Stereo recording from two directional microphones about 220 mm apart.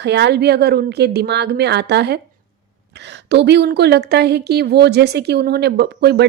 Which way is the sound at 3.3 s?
50° right (ahead or behind).